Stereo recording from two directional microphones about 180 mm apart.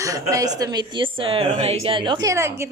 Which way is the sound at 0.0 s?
20° right (ahead or behind).